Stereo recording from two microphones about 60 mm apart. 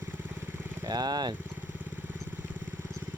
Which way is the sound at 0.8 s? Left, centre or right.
Right.